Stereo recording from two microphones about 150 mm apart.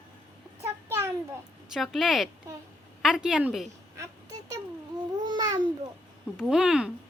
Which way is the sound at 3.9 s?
20° right (ahead or behind).